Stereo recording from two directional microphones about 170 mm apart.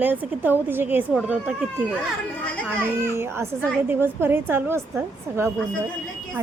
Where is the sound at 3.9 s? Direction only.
10° right (ahead or behind).